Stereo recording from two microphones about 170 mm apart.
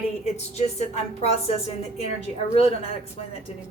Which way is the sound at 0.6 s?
40° left (ahead or behind).